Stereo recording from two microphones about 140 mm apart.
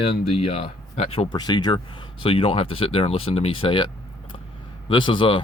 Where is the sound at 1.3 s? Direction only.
30° left (ahead or behind).